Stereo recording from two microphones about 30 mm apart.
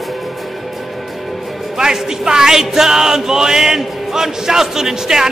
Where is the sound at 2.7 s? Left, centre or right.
Centre.